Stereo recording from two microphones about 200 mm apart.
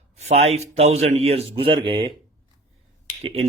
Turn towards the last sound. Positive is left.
turn(degrees=-30)  # may be behind; listen again after turning